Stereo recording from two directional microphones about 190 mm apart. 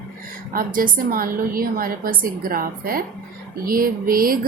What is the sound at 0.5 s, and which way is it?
A woman's voice, 45° right (ahead or behind).